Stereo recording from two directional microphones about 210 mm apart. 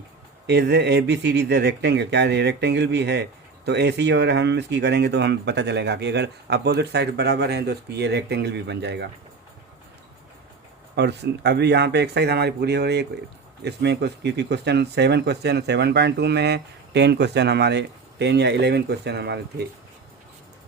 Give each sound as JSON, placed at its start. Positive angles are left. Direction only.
{"t": 0.4, "sound": "speech", "side_deg": -55}
{"t": 10.9, "sound": "speech", "side_deg": -55}